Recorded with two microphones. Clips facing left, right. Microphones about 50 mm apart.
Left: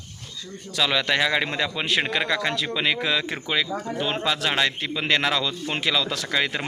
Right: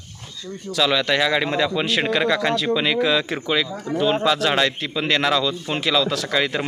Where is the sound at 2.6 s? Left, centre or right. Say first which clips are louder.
Right 5 dB; centre.